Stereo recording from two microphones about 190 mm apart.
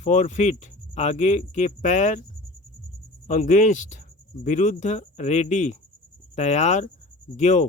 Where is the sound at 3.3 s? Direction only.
45° left (ahead or behind).